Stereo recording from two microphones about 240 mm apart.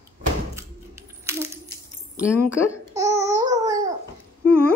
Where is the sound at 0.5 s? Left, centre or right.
Centre.